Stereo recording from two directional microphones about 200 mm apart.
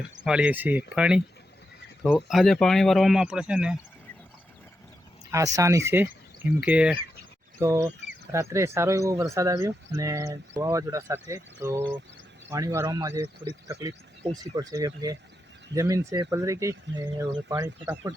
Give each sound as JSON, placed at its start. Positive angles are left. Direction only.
{"t": 0.3, "sound": "speech", "side_deg": -5}
{"t": 5.3, "sound": "speech", "side_deg": -15}
{"t": 14.5, "sound": "speech", "side_deg": -20}